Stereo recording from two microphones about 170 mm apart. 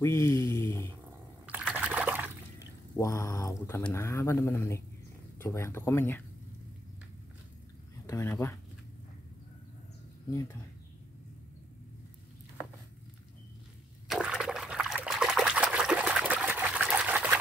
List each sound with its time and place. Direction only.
0.0 s speech: 15° left (ahead or behind)
1.4 s water: 10° right (ahead or behind)
3.0 s speech: 20° left (ahead or behind)
8.1 s speech: 15° left (ahead or behind)
14.0 s liquid: 5° right (ahead or behind)